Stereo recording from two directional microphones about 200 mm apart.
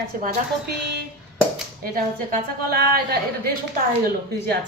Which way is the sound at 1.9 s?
50° right (ahead or behind).